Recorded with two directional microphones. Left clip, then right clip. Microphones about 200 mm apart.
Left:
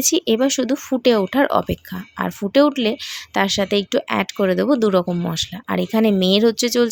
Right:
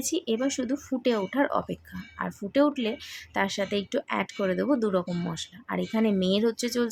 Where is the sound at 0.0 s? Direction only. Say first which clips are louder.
Left 10 dB; 45° left (ahead or behind).